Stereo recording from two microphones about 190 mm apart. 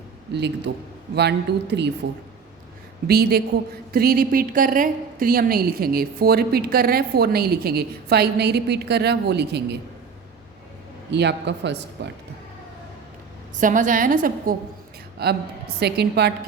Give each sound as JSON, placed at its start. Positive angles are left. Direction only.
{"t": 0.3, "sound": "a woman's voice", "side_deg": -65}
{"t": 3.1, "sound": "a woman's voice", "side_deg": -55}
{"t": 11.1, "sound": "a woman's voice", "side_deg": -65}
{"t": 13.6, "sound": "a woman's voice", "side_deg": -45}
{"t": 15.2, "sound": "a woman's voice", "side_deg": -60}